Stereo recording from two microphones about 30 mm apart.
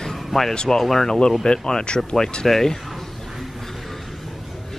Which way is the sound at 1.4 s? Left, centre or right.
Left.